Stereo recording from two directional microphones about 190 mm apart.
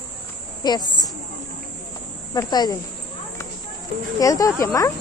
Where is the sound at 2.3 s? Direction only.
20° left (ahead or behind).